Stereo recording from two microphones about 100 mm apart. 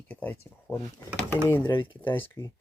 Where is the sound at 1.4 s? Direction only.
20° left (ahead or behind).